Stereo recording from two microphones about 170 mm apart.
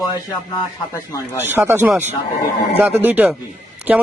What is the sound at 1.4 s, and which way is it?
Speech, 15° right (ahead or behind).